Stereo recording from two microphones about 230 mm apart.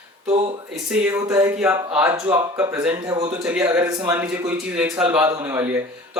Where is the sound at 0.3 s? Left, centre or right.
Right.